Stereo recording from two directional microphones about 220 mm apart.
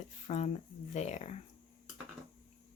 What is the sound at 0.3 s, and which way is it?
Speech, 30° left (ahead or behind).